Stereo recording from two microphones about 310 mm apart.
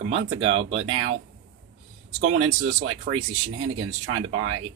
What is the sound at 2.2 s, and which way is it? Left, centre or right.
Speech, right.